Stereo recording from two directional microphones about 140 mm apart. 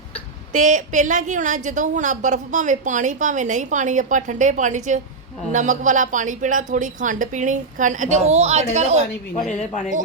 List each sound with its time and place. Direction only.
0.5 s a woman's voice: 65° right (ahead or behind)
9.5 s speech: 55° left (ahead or behind)